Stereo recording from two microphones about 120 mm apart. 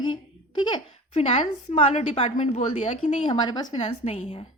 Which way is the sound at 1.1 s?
50° left (ahead or behind).